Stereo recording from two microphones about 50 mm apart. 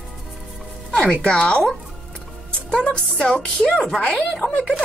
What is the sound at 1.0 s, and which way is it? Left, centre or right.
Speech, centre.